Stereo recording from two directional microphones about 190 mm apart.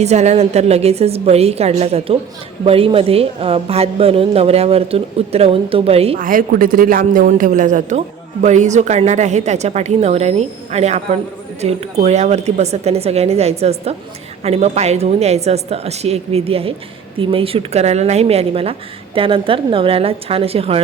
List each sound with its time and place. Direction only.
0.0 s speech: 35° right (ahead or behind)
6.1 s speech: 45° right (ahead or behind); by 20.8 s 30° right (ahead or behind)